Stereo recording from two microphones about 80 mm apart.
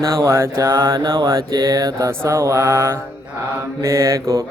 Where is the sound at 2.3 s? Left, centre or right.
Right.